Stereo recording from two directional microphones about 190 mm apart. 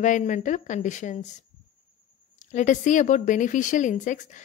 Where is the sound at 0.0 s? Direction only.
40° left (ahead or behind).